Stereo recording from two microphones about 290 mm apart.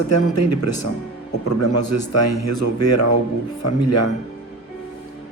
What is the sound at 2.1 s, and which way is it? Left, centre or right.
A man's voice, left.